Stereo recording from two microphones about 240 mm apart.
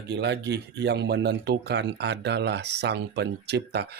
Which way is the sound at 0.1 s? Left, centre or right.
Right.